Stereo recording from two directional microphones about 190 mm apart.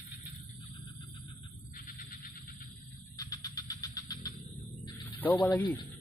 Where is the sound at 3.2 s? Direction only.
20° left (ahead or behind).